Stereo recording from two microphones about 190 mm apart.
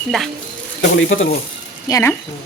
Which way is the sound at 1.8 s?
15° left (ahead or behind).